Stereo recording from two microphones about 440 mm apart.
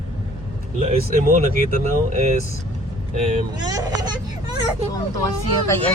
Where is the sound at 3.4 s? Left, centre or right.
Centre.